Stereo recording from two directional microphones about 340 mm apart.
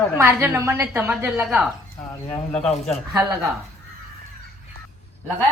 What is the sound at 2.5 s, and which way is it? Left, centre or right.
Speech, centre.